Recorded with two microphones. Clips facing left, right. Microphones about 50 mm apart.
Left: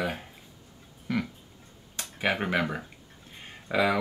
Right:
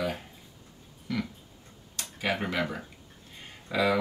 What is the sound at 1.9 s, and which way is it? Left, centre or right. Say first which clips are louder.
Speech: left 2 dB; left.